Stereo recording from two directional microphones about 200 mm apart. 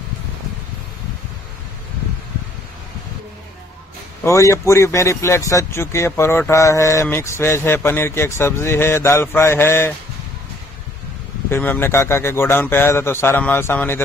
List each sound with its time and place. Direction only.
4.2 s speech: 15° left (ahead or behind)
11.5 s speech: 10° left (ahead or behind)